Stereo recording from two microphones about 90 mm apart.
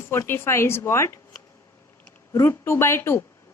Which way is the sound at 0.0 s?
25° left (ahead or behind).